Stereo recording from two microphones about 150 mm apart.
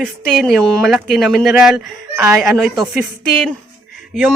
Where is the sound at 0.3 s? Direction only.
Centre (ahead or behind).